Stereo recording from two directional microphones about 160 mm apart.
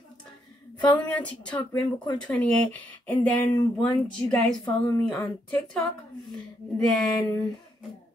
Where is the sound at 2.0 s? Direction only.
30° left (ahead or behind).